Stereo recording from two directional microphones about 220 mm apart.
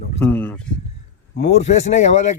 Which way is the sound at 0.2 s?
5° left (ahead or behind).